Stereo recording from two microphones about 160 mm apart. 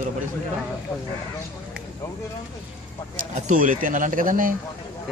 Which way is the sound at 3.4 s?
55° right (ahead or behind).